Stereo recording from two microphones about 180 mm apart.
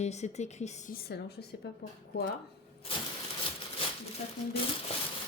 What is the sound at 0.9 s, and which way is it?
Speech, 60° left (ahead or behind).